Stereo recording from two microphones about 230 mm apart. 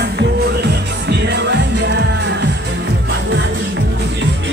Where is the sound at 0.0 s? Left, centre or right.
Right.